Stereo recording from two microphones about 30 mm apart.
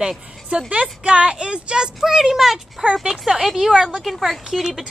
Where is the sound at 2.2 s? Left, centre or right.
Centre.